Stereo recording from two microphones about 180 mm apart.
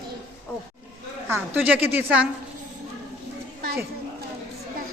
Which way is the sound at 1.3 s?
10° right (ahead or behind).